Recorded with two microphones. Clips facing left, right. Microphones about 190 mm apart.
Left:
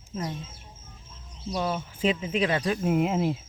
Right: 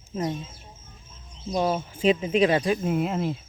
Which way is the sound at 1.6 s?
25° right (ahead or behind).